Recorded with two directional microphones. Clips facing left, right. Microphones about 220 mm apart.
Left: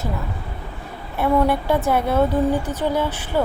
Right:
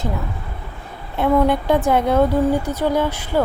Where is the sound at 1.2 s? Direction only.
20° right (ahead or behind).